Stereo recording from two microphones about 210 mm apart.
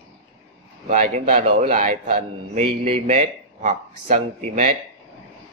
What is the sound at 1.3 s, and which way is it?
Speech, 25° right (ahead or behind).